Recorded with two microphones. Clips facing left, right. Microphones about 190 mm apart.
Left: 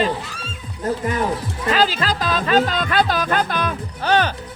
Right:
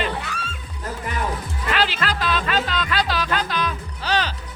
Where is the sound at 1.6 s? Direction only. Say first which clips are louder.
Left 4 dB; 40° left (ahead or behind).